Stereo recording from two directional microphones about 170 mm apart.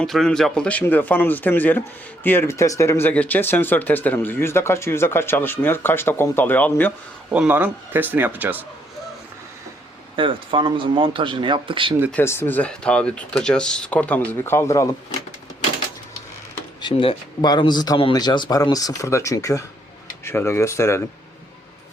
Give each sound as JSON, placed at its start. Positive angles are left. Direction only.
{"t": 0.0, "sound": "speech", "side_deg": 5}
{"t": 7.3, "sound": "speech", "side_deg": -10}
{"t": 10.2, "sound": "speech", "side_deg": -30}
{"t": 12.1, "sound": "speech", "side_deg": 15}
{"t": 16.8, "sound": "speech", "side_deg": 35}